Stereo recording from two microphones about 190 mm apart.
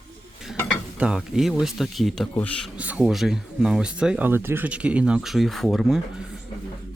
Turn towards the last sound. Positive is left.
turn(degrees=0)  # may be behind; listen again after turning